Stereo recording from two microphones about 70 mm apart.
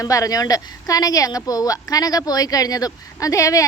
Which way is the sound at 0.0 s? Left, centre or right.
Left.